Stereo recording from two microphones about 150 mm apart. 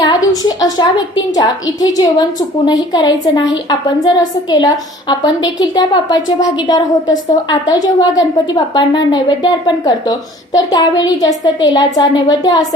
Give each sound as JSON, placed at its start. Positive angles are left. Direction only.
{"t": 0.0, "sound": "a woman's voice", "side_deg": 30}